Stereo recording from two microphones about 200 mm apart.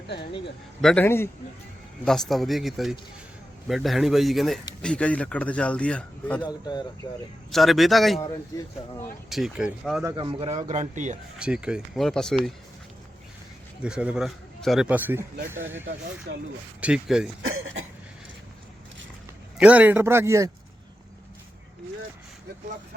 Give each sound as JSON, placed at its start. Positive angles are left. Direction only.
{"t": 0.8, "sound": "speech", "side_deg": 5}
{"t": 6.5, "sound": "speech", "side_deg": 20}
{"t": 7.5, "sound": "speech", "side_deg": 0}
{"t": 9.3, "sound": "speech", "side_deg": 0}
{"t": 10.0, "sound": "speech", "side_deg": -20}
{"t": 11.3, "sound": "speech", "side_deg": -5}
{"t": 13.8, "sound": "speech", "side_deg": -5}
{"t": 16.8, "sound": "speech", "side_deg": -5}
{"t": 17.4, "sound": "speech", "side_deg": -90}
{"t": 19.5, "sound": "a man's voice", "side_deg": -5}